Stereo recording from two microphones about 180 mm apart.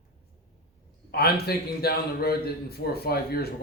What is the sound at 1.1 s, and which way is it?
A man's voice, 60° left (ahead or behind).